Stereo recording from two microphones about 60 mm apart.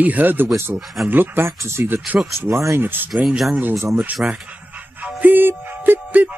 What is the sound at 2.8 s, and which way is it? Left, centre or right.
Speech, right.